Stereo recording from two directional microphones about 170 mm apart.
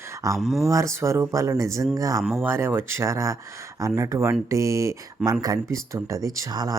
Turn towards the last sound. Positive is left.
turn(degrees=-20)  # may be behind; listen again after turning